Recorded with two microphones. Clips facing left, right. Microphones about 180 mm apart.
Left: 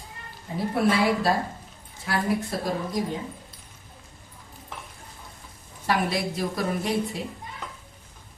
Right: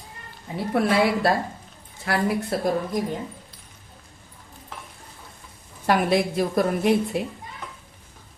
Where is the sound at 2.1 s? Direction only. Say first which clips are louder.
Right 3 dB; 70° right (ahead or behind).